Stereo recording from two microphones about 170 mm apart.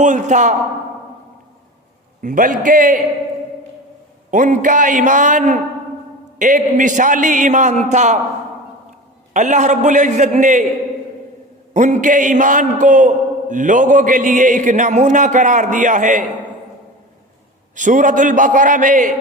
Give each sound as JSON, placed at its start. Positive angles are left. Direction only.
{"t": 0.0, "sound": "a man's voice", "side_deg": -45}
{"t": 2.2, "sound": "a man's voice", "side_deg": -50}
{"t": 4.3, "sound": "a man's voice", "side_deg": -50}
{"t": 9.3, "sound": "a man's voice", "side_deg": -45}
{"t": 11.7, "sound": "a man's voice", "side_deg": -45}
{"t": 17.7, "sound": "a man's voice", "side_deg": -50}